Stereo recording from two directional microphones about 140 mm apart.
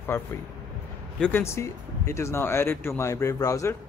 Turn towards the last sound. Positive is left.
turn(degrees=25)  # may be behind; listen again after turning